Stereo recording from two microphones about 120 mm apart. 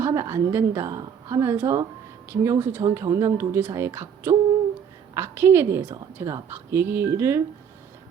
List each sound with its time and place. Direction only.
0.0 s a woman's voice: 20° right (ahead or behind)